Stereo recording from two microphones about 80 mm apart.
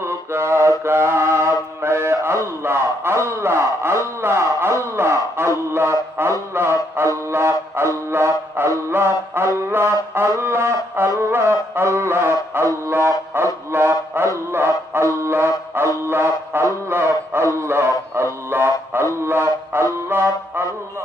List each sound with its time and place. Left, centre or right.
0.0 s mantra: right
16.0 s music: right